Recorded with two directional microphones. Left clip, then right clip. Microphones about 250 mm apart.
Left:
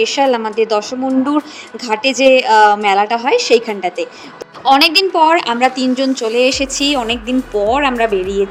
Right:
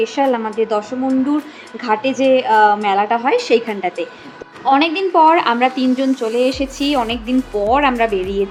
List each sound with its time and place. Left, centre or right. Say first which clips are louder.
0.0 s a woman's voice: left 3 dB; left
2.0 s a woman's voice: left 5 dB; left
4.6 s a woman's voice: left 4 dB; left